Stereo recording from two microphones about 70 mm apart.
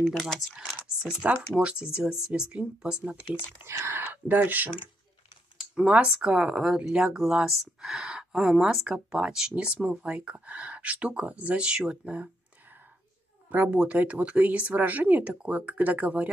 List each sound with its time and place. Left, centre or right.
0.0 s speech: centre
1.3 s speech: right
3.9 s speech: right
5.6 s speech: centre
13.5 s speech: right